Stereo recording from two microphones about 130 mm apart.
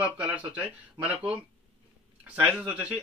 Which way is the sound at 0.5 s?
10° right (ahead or behind).